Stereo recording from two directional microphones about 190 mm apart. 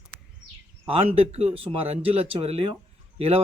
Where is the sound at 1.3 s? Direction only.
35° right (ahead or behind).